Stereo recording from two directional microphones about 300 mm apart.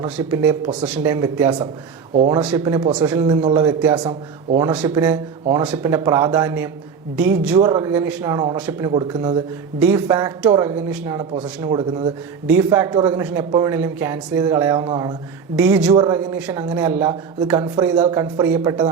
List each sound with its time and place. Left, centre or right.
0.0 s speech: centre
2.4 s speech: centre